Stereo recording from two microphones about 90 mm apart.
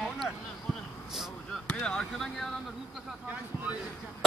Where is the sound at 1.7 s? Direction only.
10° left (ahead or behind).